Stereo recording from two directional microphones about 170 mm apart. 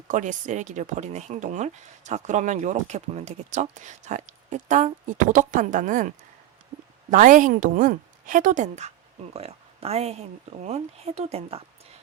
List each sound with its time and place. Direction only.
0.1 s speech: 45° right (ahead or behind)
6.7 s a sound: 25° right (ahead or behind)
7.1 s speech: 50° right (ahead or behind)